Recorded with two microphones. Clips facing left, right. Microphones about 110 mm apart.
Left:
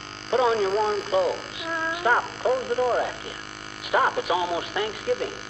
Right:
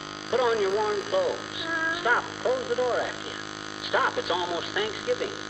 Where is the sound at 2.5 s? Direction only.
10° right (ahead or behind).